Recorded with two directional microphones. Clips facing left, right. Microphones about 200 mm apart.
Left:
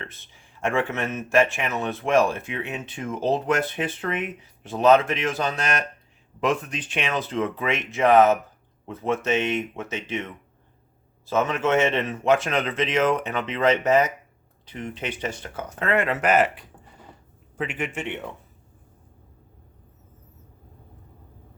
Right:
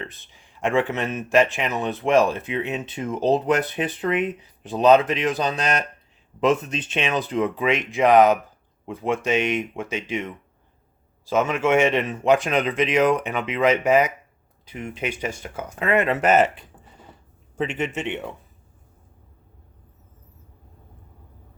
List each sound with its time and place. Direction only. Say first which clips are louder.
0.0 s speech: right 4 dB; 15° right (ahead or behind)
11.3 s a man's voice: right 2 dB; 10° right (ahead or behind)